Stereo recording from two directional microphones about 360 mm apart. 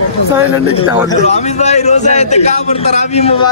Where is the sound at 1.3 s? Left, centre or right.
Centre.